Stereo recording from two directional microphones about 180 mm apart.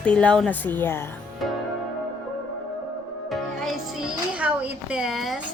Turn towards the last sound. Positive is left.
turn(degrees=0)  # may be behind; listen again after turning